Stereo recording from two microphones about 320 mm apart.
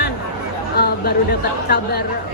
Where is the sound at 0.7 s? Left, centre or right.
Left.